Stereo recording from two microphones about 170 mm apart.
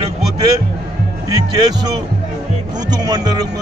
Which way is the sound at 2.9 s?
25° right (ahead or behind).